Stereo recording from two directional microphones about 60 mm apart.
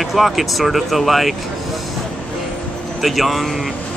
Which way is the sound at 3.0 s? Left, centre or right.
Centre.